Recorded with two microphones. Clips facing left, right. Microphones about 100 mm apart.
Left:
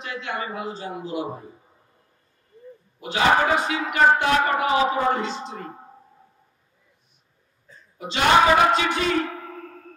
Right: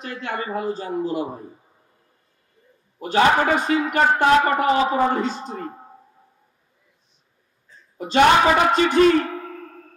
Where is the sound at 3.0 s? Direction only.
45° right (ahead or behind).